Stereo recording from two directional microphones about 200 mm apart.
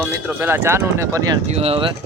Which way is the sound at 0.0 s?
10° right (ahead or behind).